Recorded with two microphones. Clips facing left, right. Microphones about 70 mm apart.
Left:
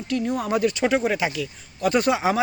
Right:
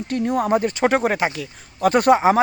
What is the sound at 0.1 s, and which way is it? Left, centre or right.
Speech, right.